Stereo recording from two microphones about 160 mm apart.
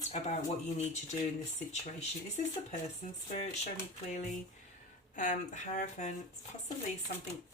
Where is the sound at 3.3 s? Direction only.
45° left (ahead or behind).